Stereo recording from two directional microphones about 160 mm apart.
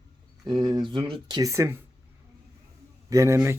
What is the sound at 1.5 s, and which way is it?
Speech, 15° right (ahead or behind).